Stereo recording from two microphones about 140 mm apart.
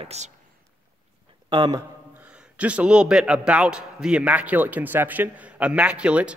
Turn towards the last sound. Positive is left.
turn(degrees=-10)  # may be behind; listen again after turning